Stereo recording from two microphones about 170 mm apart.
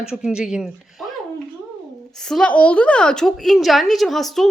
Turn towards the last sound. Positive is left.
turn(degrees=0)  # may be behind; listen again after turning